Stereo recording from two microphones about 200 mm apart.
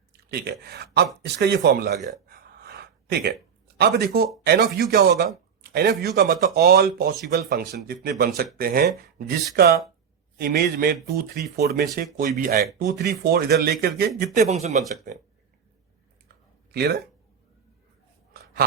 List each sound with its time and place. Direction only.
0.3 s speech: 55° right (ahead or behind)
2.0 s a sound: 45° right (ahead or behind)
3.8 s speech: 55° right (ahead or behind)
11.9 s speech: 40° right (ahead or behind)
14.3 s speech: 35° right (ahead or behind)
16.7 s speech: 55° right (ahead or behind)